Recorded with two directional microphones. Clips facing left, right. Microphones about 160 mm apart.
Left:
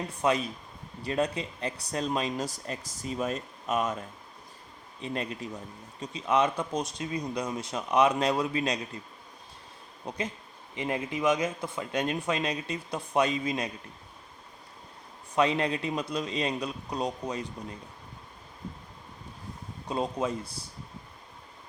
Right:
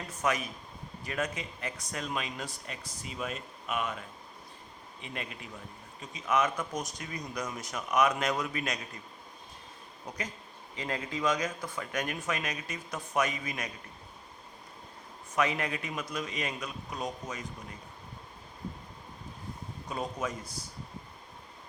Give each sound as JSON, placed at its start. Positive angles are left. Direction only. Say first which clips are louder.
{"t": 0.2, "sound": "speech", "louder": "left 4 dB", "side_deg": 30}
{"t": 4.9, "sound": "speech", "louder": "left 8 dB", "side_deg": 35}
{"t": 10.1, "sound": "speech", "louder": "left 5 dB", "side_deg": 25}
{"t": 15.4, "sound": "speech", "louder": "left 5 dB", "side_deg": 30}
{"t": 19.9, "sound": "speech", "louder": "left 5 dB", "side_deg": 30}